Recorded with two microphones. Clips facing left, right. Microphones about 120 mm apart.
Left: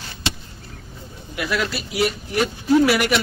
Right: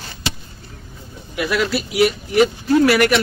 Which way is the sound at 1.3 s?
5° right (ahead or behind).